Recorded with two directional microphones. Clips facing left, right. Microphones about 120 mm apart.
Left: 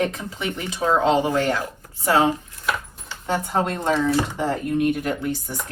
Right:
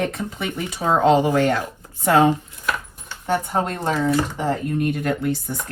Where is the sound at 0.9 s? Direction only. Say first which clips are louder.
Right 3 dB; 50° right (ahead or behind).